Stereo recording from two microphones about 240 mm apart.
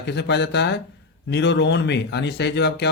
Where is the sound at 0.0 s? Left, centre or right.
Left.